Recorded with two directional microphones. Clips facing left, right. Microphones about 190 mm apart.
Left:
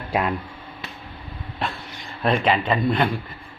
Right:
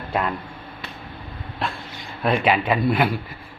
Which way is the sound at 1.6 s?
Centre (ahead or behind).